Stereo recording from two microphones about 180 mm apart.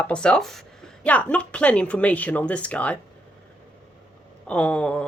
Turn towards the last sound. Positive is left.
turn(degrees=5)  # may be behind; listen again after turning